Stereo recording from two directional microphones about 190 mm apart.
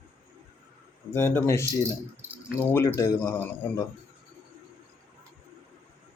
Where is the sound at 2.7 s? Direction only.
15° left (ahead or behind).